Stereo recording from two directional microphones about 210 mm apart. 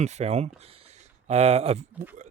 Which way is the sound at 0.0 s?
30° right (ahead or behind).